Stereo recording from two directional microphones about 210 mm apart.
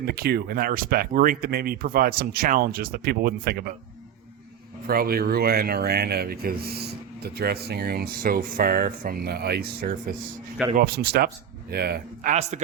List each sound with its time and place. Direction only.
0.0 s speech: 45° right (ahead or behind)
4.9 s speech: 45° right (ahead or behind)